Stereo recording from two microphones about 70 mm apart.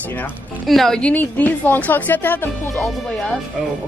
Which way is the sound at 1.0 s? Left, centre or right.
Left.